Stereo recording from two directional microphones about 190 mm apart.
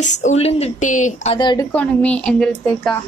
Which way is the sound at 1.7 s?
5° left (ahead or behind).